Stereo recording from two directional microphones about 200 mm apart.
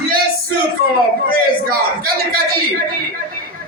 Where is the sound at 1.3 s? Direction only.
45° right (ahead or behind).